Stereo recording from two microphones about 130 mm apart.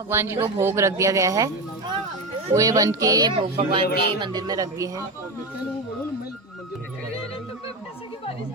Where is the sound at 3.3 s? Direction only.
45° right (ahead or behind); by 5.0 s 25° right (ahead or behind).